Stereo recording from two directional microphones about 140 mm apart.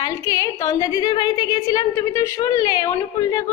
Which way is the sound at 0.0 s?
25° left (ahead or behind).